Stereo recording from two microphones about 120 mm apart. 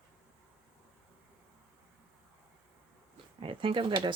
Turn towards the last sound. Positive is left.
turn(degrees=-45)  # may be behind; listen again after turning